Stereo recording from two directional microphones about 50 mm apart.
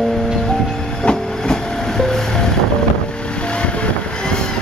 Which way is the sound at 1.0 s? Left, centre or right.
Centre.